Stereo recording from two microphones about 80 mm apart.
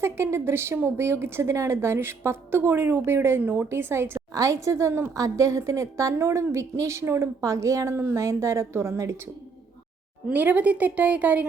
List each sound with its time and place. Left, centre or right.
0.0 s a woman's voice: right
4.3 s a woman's voice: right
10.3 s a woman's voice: centre